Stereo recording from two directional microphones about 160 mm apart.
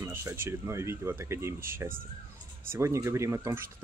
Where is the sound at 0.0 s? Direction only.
15° right (ahead or behind).